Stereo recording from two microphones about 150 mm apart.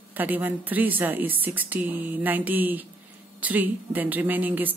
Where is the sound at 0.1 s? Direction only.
10° right (ahead or behind).